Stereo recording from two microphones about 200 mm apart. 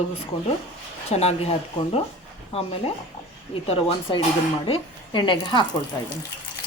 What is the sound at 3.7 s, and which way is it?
Speech, 30° left (ahead or behind).